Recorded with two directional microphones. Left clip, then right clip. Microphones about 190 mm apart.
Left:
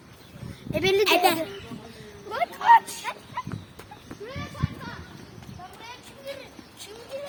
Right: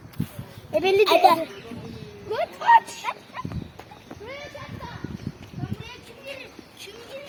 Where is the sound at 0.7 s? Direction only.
25° left (ahead or behind).